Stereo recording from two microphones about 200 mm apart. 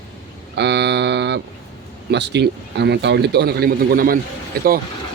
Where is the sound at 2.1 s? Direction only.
60° right (ahead or behind).